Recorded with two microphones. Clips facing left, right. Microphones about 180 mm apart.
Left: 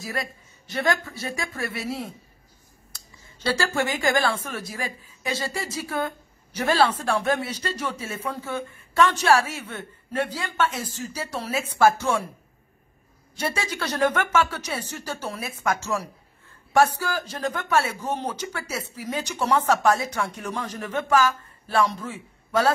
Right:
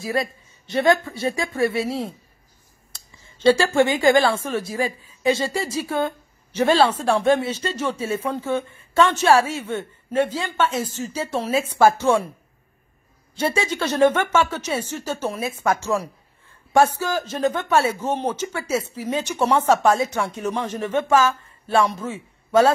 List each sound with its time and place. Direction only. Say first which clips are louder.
0.0 s speech: right 7 dB; 25° right (ahead or behind)
13.4 s speech: right 6 dB; 25° right (ahead or behind)
15.6 s a man's voice: right 4 dB; 30° right (ahead or behind)